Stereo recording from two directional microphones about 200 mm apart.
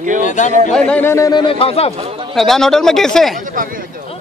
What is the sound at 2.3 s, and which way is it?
Speech, centre (ahead or behind).